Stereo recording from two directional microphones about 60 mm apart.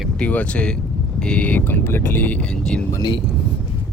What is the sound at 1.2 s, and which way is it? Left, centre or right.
Speech, centre.